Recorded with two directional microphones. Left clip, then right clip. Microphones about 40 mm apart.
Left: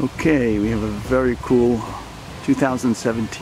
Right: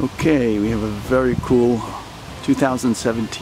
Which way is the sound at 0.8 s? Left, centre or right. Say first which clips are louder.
Right 1 dB; centre.